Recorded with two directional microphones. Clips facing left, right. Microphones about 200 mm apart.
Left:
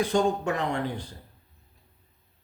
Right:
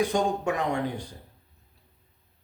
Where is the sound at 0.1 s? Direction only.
15° right (ahead or behind).